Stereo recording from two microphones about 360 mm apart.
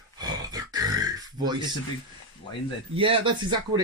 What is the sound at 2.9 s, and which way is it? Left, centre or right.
Speech, centre.